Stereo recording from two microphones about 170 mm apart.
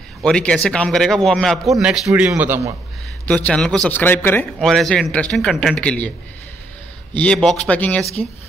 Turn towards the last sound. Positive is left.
turn(degrees=10)  # may be behind; listen again after turning